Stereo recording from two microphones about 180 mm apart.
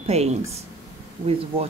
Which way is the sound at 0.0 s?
35° right (ahead or behind).